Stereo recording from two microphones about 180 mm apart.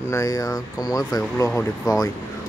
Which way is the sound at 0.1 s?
20° left (ahead or behind).